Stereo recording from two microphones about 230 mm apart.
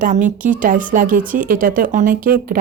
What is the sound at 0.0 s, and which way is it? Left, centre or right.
Speech, right.